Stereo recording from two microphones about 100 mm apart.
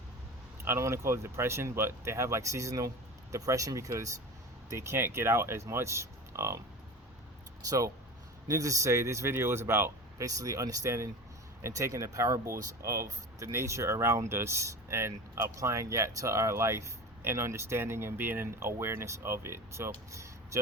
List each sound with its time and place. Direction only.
0.6 s speech: 25° right (ahead or behind)
7.7 s speech: 35° right (ahead or behind)